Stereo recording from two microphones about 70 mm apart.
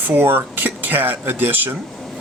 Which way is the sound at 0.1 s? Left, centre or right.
Right.